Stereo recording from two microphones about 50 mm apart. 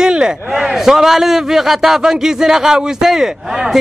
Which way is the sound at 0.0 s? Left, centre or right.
Centre.